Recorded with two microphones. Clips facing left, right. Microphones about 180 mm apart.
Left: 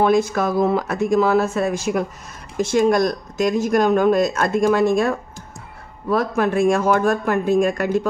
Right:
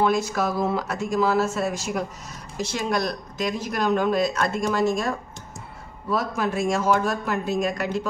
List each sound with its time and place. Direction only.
0.0 s speech: 55° left (ahead or behind)